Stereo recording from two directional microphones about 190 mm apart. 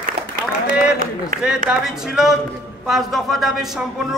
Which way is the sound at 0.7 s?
45° right (ahead or behind).